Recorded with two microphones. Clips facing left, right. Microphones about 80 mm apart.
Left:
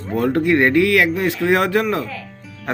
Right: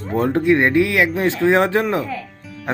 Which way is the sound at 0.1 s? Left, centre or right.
Right.